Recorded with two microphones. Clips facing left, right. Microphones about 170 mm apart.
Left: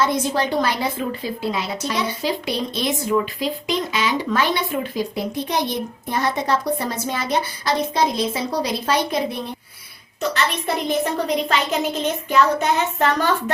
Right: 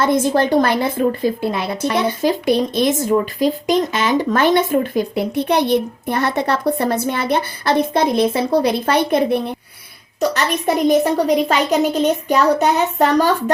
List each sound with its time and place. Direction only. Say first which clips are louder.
0.0 s a woman's voice: right 5 dB; 50° right (ahead or behind)
10.8 s a child's voice: right 8 dB; 40° right (ahead or behind)